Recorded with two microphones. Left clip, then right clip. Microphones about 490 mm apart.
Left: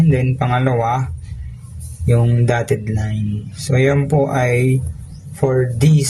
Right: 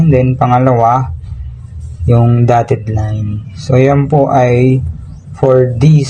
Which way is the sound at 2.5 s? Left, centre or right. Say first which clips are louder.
Right 8 dB; left.